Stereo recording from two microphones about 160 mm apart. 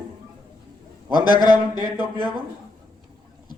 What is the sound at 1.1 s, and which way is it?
Speech, 25° left (ahead or behind).